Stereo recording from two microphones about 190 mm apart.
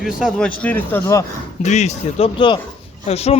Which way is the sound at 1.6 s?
35° left (ahead or behind).